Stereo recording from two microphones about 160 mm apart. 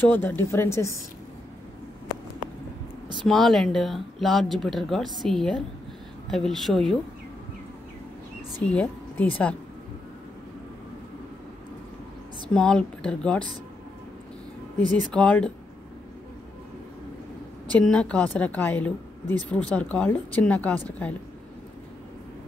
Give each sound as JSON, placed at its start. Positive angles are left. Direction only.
{"t": 0.0, "sound": "a woman's voice", "side_deg": 10}
{"t": 3.3, "sound": "speech", "side_deg": 0}
{"t": 8.6, "sound": "speech", "side_deg": 10}
{"t": 12.5, "sound": "speech", "side_deg": 5}
{"t": 15.1, "sound": "a woman's voice", "side_deg": 5}
{"t": 17.7, "sound": "a woman's voice", "side_deg": 10}